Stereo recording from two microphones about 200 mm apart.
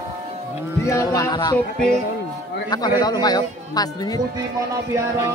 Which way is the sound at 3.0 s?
20° left (ahead or behind).